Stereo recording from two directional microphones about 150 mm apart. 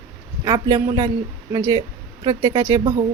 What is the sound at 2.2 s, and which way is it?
Speech, 25° right (ahead or behind).